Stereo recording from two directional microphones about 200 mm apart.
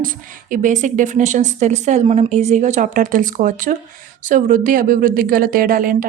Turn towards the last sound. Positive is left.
turn(degrees=-45)  # may be behind; listen again after turning